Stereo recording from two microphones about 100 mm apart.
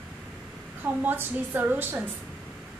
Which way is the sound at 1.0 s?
20° right (ahead or behind).